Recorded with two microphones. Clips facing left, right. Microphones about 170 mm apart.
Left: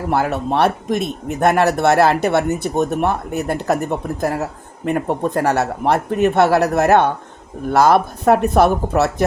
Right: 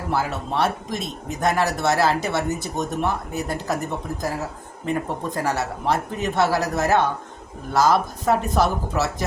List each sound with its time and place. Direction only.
0.1 s speech: 60° left (ahead or behind)
4.9 s speech: 60° left (ahead or behind)